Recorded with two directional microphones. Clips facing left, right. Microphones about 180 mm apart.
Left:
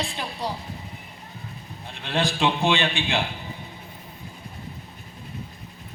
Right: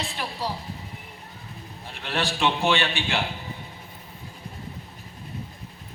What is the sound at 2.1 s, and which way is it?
A man's voice, 15° left (ahead or behind).